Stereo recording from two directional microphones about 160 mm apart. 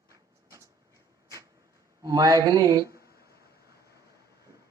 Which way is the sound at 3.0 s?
75° left (ahead or behind).